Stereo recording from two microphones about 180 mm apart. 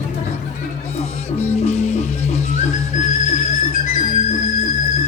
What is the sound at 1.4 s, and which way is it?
Music, 35° left (ahead or behind).